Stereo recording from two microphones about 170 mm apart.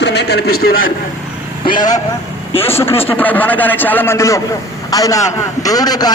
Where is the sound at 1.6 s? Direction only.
25° left (ahead or behind).